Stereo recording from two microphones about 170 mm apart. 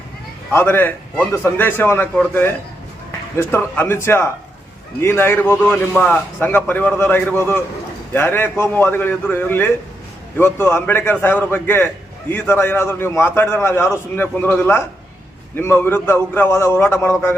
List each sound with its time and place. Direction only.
0.5 s a man's voice: 10° left (ahead or behind)